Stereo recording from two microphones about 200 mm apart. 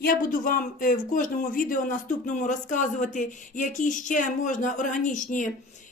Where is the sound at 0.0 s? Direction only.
45° left (ahead or behind).